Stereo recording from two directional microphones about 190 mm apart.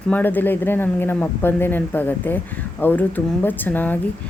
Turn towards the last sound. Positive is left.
turn(degrees=10)  # may be behind; listen again after turning